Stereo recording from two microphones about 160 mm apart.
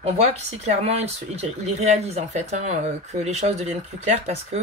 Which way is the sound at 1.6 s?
45° right (ahead or behind).